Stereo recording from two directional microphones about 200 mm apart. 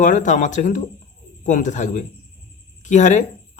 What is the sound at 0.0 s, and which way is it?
Speech, 40° left (ahead or behind).